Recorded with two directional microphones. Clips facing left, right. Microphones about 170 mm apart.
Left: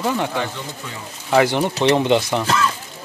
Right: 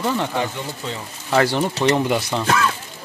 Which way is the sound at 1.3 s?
15° left (ahead or behind).